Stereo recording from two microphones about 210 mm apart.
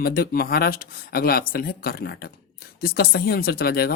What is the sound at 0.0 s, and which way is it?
Speech, 45° left (ahead or behind).